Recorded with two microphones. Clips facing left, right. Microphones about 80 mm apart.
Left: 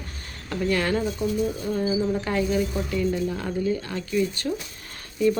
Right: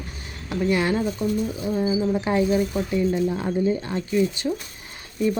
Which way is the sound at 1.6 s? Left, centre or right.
Centre.